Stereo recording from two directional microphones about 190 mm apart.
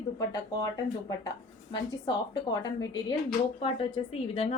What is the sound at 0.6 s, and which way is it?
A woman's voice, 20° left (ahead or behind).